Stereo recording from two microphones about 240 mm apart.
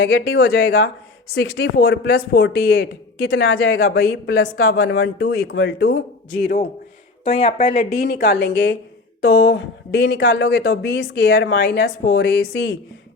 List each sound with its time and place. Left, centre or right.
0.0 s speech: left
7.3 s speech: left
7.8 s speech: left